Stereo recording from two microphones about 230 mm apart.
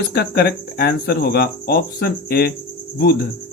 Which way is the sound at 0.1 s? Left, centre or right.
Left.